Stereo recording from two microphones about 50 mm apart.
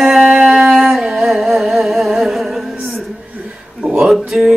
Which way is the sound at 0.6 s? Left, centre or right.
Centre.